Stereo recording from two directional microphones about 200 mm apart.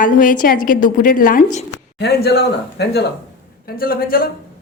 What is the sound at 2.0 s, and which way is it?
A woman's voice, 55° left (ahead or behind).